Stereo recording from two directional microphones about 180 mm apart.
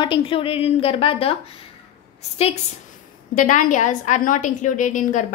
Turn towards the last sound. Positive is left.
turn(degrees=45)  # may be behind; listen again after turning